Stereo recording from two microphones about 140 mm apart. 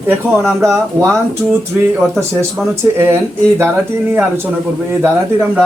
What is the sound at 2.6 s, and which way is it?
Speech, centre (ahead or behind).